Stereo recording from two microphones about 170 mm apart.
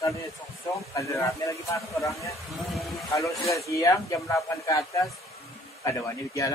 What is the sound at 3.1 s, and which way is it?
Speech, 20° left (ahead or behind).